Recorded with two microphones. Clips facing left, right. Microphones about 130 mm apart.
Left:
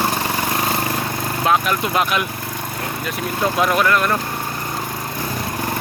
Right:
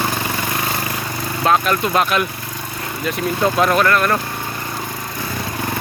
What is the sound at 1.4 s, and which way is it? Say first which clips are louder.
Speech: right 2 dB; 10° left (ahead or behind).